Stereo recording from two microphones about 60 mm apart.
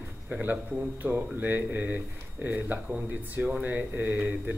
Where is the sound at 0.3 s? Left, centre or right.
Right.